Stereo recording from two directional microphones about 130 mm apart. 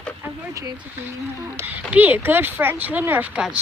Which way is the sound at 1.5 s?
20° right (ahead or behind).